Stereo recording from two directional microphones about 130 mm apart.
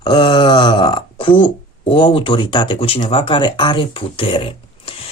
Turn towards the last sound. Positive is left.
turn(degrees=45)  # may be behind; listen again after turning